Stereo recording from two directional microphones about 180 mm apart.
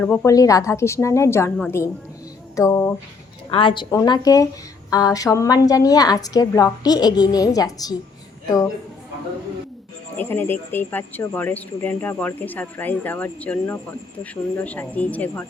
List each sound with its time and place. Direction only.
0.0 s speech: 5° left (ahead or behind)
0.3 s speech: 20° left (ahead or behind)
3.5 s a woman's voice: 30° left (ahead or behind)
10.2 s speech: 10° left (ahead or behind)